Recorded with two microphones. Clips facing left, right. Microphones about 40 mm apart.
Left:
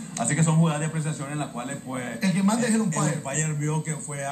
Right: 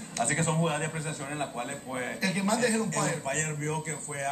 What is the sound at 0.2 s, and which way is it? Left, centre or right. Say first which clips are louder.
A man's voice: left 4 dB; centre.